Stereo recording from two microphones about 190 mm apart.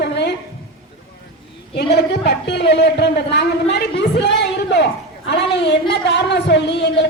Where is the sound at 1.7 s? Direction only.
60° left (ahead or behind).